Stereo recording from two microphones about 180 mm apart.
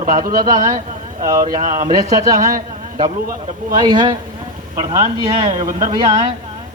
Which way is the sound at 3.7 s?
20° right (ahead or behind).